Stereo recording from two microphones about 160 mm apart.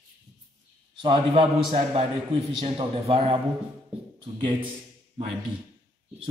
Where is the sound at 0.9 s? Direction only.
35° right (ahead or behind).